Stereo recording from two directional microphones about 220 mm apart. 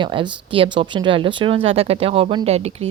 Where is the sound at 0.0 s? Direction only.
20° right (ahead or behind).